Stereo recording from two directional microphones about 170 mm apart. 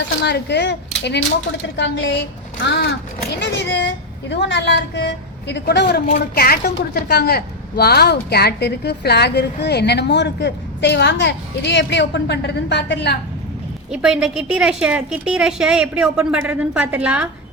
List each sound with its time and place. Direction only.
0.3 s a woman's voice: 85° left
2.6 s a woman's voice: 80° left
3.4 s a woman's voice: 90° left
6.1 s a woman's voice: 65° left (ahead or behind); by 13.1 s 90° left
13.9 s a woman's voice: 5° right (ahead or behind)